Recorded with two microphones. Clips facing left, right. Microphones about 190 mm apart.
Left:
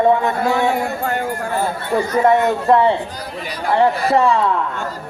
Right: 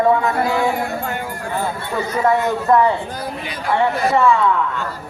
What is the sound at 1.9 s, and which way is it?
Speech, 30° left (ahead or behind).